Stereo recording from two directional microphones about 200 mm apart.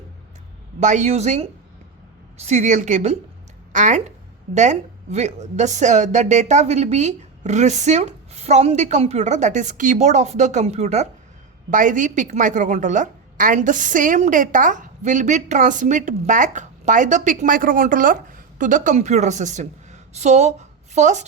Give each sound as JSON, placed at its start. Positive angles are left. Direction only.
{"t": 0.8, "sound": "a woman's voice", "side_deg": -35}